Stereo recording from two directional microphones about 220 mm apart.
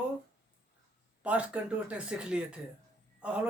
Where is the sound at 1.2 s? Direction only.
5° right (ahead or behind).